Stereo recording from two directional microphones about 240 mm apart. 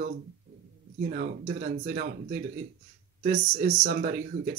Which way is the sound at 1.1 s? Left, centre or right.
Right.